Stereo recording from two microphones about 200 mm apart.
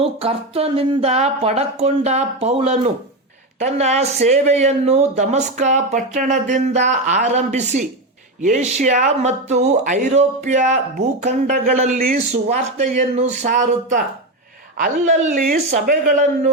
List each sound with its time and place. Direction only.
0.0 s speech: 30° right (ahead or behind)